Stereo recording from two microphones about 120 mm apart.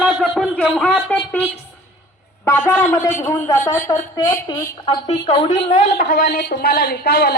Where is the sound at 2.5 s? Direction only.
15° left (ahead or behind).